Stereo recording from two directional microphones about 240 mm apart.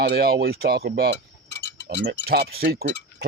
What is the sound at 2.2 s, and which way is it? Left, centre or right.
Speech, right.